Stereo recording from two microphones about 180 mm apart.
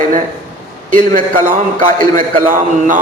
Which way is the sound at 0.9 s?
50° right (ahead or behind).